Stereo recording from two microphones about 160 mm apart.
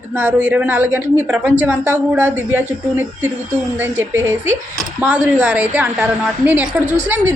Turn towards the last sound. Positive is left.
turn(degrees=-10)  # may be behind; listen again after turning